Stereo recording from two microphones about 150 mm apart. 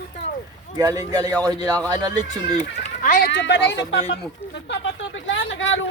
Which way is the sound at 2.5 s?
45° left (ahead or behind).